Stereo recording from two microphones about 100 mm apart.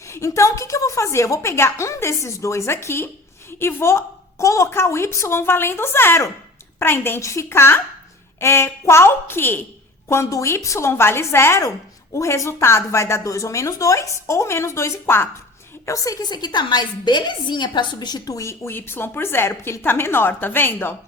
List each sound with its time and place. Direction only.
0.1 s a woman's voice: 30° left (ahead or behind)
15.9 s a woman's voice: 35° left (ahead or behind)